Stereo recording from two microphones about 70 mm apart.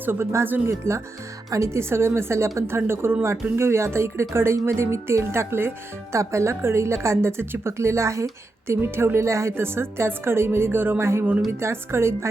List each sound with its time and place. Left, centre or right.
0.0 s speech: right
0.7 s speech: right